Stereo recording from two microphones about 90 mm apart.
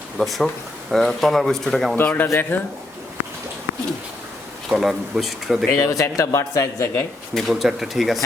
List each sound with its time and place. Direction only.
0.2 s speech: centre (ahead or behind)
2.0 s speech: 20° left (ahead or behind)
4.7 s speech: 5° right (ahead or behind)
5.8 s speech: 35° left (ahead or behind)
7.3 s speech: centre (ahead or behind)